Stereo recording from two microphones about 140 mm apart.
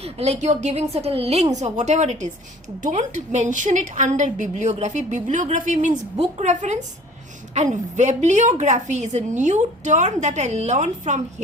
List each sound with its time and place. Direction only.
0.0 s a woman's voice: 50° right (ahead or behind)
6.1 s a woman's voice: 50° right (ahead or behind)